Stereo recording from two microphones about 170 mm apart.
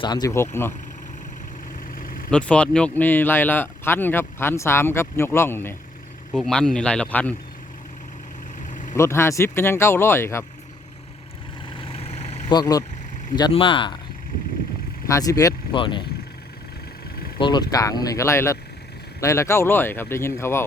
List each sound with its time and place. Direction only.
0.0 s speech: 25° left (ahead or behind)
2.3 s speech: 5° left (ahead or behind)
8.5 s vehicle: 50° left (ahead or behind)
9.0 s speech: 15° left (ahead or behind)
11.8 s vehicle: 35° left (ahead or behind)
12.5 s speech: 25° left (ahead or behind)
15.0 s speech: 20° left (ahead or behind)
17.4 s speech: 25° left (ahead or behind)